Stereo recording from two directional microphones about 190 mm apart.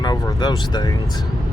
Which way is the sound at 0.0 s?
20° left (ahead or behind).